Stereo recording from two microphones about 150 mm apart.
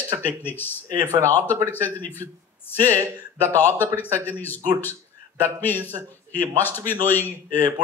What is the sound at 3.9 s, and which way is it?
Speech, 15° left (ahead or behind).